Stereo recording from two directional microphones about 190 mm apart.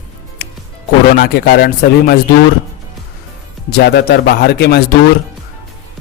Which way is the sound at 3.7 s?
55° left (ahead or behind).